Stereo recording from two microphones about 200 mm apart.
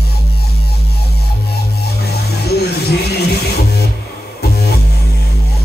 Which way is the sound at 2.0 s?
55° left (ahead or behind).